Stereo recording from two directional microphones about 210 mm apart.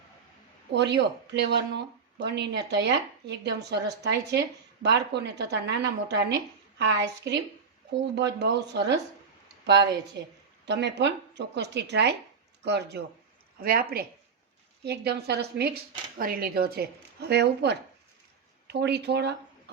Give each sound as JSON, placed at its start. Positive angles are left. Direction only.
{"t": 0.7, "sound": "a woman's voice", "side_deg": -55}
{"t": 10.2, "sound": "a woman's voice", "side_deg": -55}